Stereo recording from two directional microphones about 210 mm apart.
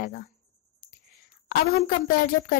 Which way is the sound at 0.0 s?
40° left (ahead or behind).